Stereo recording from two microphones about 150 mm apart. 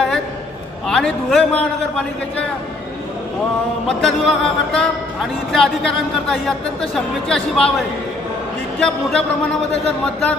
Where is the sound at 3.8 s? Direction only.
5° left (ahead or behind).